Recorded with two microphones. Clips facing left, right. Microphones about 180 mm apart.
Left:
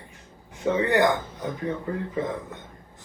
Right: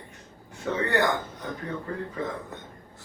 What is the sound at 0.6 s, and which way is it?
Speech, 15° left (ahead or behind).